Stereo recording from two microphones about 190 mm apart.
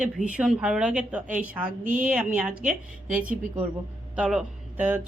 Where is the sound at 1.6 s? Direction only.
45° right (ahead or behind).